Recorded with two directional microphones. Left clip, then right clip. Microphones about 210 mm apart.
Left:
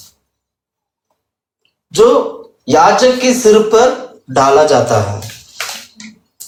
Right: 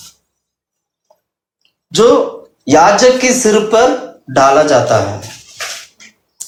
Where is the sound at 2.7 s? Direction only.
25° right (ahead or behind).